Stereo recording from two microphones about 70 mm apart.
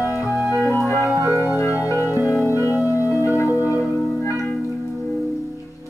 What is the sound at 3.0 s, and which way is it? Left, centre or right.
Music, left.